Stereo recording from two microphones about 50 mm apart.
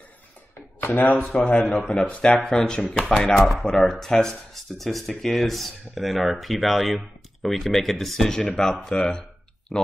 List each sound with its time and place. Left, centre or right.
0.8 s speech: left
1.3 s a man's voice: left
3.0 s speech: centre
3.3 s speech: centre
9.7 s speech: centre